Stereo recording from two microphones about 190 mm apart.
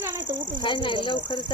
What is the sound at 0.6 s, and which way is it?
Speech, 25° left (ahead or behind).